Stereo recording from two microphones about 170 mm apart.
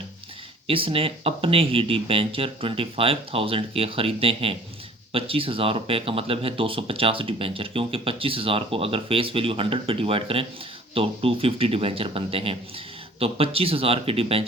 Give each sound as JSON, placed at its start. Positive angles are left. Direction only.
{"t": 0.7, "sound": "speech", "side_deg": -30}